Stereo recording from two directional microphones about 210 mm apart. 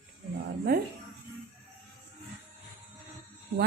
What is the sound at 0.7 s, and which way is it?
Toothbrush, 45° right (ahead or behind).